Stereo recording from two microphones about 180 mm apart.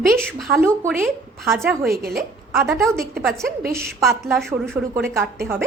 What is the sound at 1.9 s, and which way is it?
Speech, 55° right (ahead or behind).